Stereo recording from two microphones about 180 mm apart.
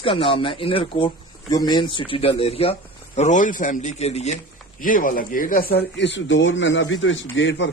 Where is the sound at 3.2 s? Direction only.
45° left (ahead or behind).